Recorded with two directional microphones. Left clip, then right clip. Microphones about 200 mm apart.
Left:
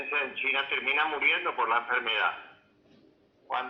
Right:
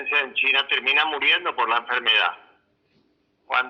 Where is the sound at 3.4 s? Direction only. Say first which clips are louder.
Right 9 dB; 45° right (ahead or behind).